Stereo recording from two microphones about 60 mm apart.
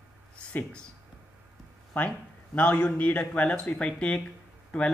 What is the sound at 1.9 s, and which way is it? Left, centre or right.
Speech, left.